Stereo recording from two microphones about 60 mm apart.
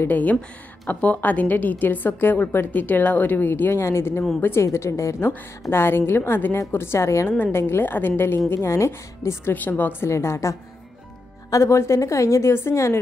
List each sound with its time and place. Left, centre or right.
0.1 s a woman's voice: left
4.6 s a woman's voice: left
5.7 s a woman's voice: left
7.5 s a woman's voice: left
8.5 s a woman's voice: left
9.5 s a woman's voice: left
10.0 s a woman's voice: left
11.5 s a woman's voice: left